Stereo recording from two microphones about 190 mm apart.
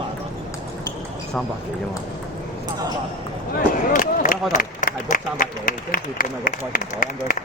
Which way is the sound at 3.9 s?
45° left (ahead or behind).